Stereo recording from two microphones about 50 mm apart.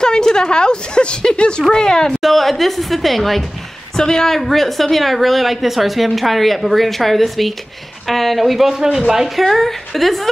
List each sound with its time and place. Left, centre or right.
0.0 s a woman's voice: centre
2.2 s a woman's voice: centre